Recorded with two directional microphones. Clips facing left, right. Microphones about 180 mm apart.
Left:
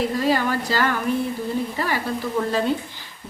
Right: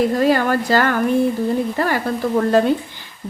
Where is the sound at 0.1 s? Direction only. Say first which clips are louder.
Right 5 dB; 55° right (ahead or behind).